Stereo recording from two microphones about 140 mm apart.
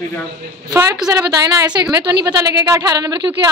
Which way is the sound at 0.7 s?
25° right (ahead or behind).